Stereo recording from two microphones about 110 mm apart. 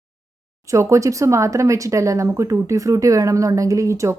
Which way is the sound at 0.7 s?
25° right (ahead or behind).